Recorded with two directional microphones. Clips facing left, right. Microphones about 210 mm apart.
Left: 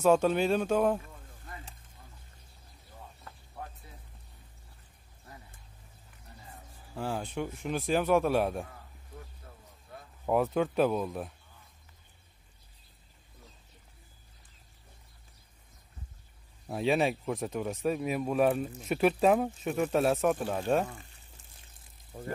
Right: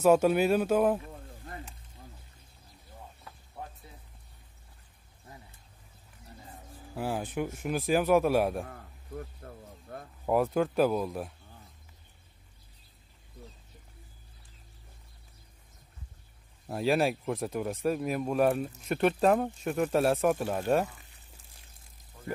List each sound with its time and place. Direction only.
0.0 s speech: 5° right (ahead or behind)
1.0 s a sound: 50° right (ahead or behind)
7.0 s speech: 10° right (ahead or behind)
9.4 s a sound: 50° right (ahead or behind)
10.2 s speech: centre (ahead or behind)
16.6 s speech: centre (ahead or behind)
22.1 s music: 50° left (ahead or behind)